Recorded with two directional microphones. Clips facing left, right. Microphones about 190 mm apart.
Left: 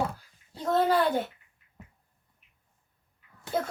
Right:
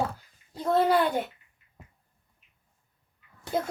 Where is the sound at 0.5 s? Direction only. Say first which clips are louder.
Right 1 dB; 10° right (ahead or behind).